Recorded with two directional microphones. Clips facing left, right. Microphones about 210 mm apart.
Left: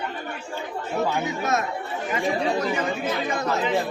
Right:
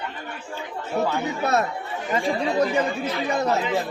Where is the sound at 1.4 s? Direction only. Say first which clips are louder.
Right 4 dB; 35° right (ahead or behind).